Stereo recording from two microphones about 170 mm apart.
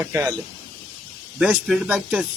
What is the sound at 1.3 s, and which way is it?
Speech, 5° right (ahead or behind).